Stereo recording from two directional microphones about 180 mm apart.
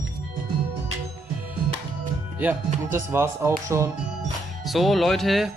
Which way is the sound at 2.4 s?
10° right (ahead or behind).